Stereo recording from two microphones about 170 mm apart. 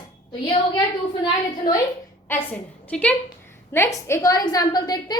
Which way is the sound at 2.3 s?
10° left (ahead or behind).